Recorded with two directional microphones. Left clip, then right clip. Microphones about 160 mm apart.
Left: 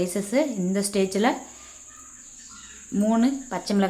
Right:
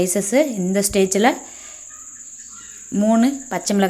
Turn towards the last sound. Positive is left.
turn(degrees=-30)  # may be behind; listen again after turning